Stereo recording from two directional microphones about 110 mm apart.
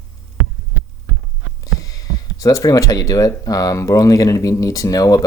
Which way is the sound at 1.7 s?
35° left (ahead or behind).